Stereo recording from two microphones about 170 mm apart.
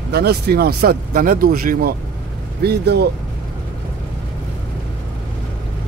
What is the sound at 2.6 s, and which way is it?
Speech, 75° right (ahead or behind).